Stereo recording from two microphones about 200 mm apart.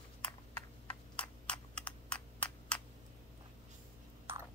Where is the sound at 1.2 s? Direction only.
5° left (ahead or behind).